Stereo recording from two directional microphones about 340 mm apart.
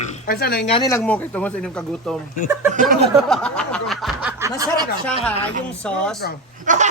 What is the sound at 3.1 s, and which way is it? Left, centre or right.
Snicker, centre.